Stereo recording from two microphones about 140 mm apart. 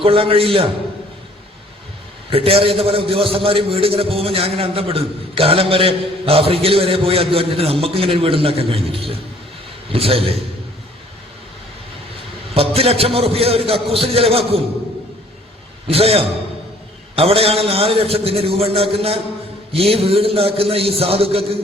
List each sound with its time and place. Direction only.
0.0 s a man's voice: 40° right (ahead or behind)
2.3 s a man's voice: 40° right (ahead or behind)
12.5 s a man's voice: 45° right (ahead or behind)
15.9 s a man's voice: 45° right (ahead or behind)